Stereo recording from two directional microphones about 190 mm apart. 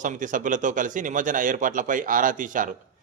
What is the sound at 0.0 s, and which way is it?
A man's voice, 45° right (ahead or behind).